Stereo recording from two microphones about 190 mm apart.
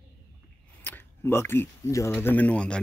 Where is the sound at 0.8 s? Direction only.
10° left (ahead or behind).